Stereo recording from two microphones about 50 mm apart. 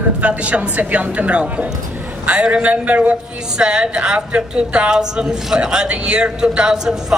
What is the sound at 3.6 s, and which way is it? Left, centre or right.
A woman's voice, centre.